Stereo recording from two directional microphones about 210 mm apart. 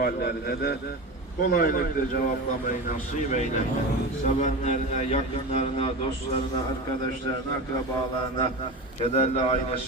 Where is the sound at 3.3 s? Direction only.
35° left (ahead or behind).